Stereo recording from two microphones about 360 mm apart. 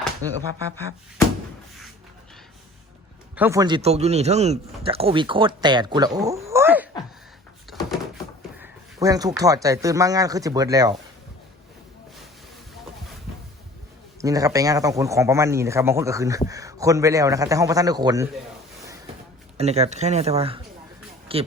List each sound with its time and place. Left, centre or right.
3.3 s speech: centre
8.5 s speech: centre
14.2 s speech: centre
19.5 s speech: centre